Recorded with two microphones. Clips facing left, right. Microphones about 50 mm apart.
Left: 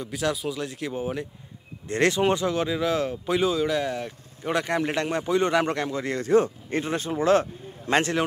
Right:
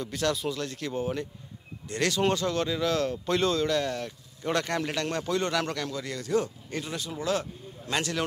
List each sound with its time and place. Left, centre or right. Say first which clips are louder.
0.0 s speech: left 1 dB; centre
1.9 s speech: left 4 dB; left